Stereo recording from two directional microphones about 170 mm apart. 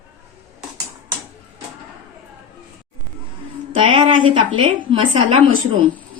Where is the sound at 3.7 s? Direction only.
30° right (ahead or behind).